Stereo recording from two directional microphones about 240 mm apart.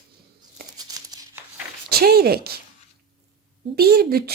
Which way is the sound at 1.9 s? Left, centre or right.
Right.